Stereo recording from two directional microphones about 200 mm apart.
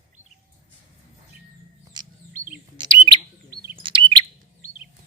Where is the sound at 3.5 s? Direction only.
25° right (ahead or behind).